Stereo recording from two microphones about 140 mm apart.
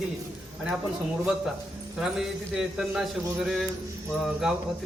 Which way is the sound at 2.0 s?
5° right (ahead or behind).